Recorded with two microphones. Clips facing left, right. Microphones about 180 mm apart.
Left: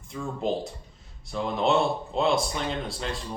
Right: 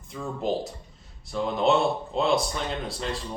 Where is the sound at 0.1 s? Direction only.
Centre (ahead or behind).